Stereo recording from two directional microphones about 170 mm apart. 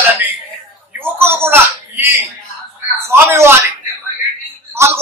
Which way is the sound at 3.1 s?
15° right (ahead or behind).